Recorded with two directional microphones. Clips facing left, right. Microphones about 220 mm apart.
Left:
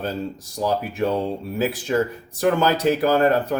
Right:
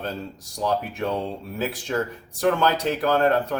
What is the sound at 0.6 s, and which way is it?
Speech, 5° left (ahead or behind).